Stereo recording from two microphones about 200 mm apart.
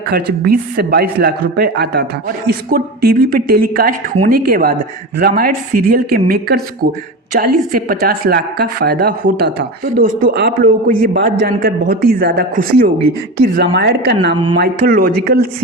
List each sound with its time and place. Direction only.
0.1 s speech: 50° right (ahead or behind)